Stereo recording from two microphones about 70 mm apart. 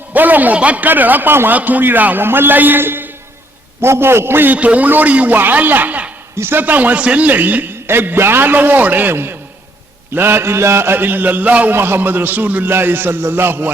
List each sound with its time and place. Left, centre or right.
0.1 s a man's voice: right
4.5 s a man's voice: centre
11.7 s a man's voice: right